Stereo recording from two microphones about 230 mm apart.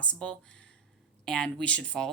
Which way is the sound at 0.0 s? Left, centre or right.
Centre.